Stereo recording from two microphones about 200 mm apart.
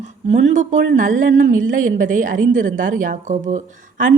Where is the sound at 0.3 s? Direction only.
35° right (ahead or behind).